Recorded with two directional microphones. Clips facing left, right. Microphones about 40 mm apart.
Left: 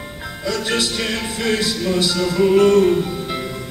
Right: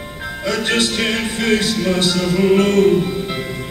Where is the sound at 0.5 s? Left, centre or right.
Right.